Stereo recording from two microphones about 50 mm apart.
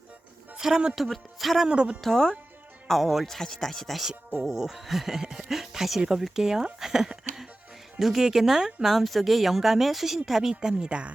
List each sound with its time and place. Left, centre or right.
0.5 s a woman's voice: centre
0.9 s speech: centre
1.6 s speech: centre
2.0 s speech: centre
4.1 s speech: centre
6.7 s a sound: centre
7.9 s speech: centre